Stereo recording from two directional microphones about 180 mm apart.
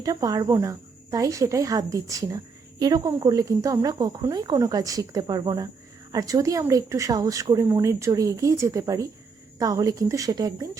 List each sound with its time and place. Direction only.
0.0 s speech: 20° right (ahead or behind)